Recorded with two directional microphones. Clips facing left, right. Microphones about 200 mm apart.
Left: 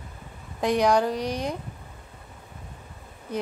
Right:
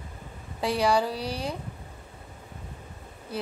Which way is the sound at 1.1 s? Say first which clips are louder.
Left 4 dB; 35° right (ahead or behind).